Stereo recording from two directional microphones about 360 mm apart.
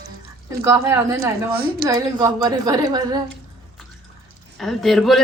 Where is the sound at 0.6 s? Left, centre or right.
Centre.